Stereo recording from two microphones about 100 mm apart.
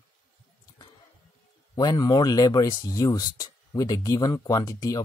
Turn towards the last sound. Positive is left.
turn(degrees=35)  # may be behind; listen again after turning